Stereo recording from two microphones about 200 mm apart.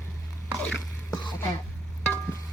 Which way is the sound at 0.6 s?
Centre (ahead or behind).